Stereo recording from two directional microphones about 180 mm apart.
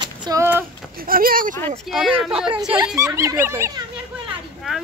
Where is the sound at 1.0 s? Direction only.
55° right (ahead or behind).